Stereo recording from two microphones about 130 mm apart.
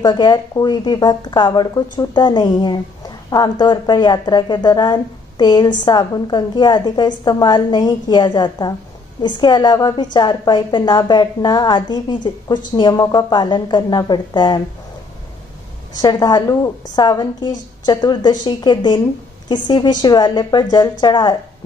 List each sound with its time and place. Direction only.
0.0 s speech: 35° left (ahead or behind)
16.0 s speech: 30° left (ahead or behind)